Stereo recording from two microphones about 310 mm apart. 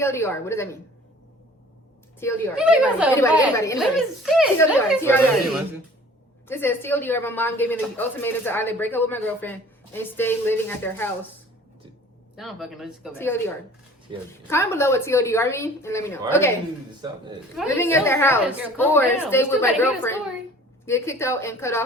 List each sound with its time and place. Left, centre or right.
0.0 s a woman's voice: centre
2.2 s a woman's voice: centre
2.6 s speech: centre
3.2 s a woman's voice: centre
3.8 s a woman's voice: centre
12.4 s speech: centre
14.1 s a woman's voice: centre
14.5 s a woman's voice: centre
17.6 s a woman's voice: centre